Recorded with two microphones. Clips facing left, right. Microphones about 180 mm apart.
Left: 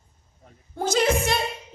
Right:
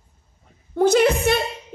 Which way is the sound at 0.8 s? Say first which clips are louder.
Right 6 dB; 60° right (ahead or behind).